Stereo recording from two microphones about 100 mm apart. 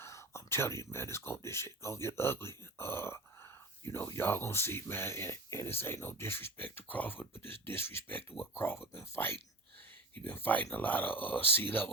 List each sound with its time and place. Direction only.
0.0 s speech: 30° left (ahead or behind)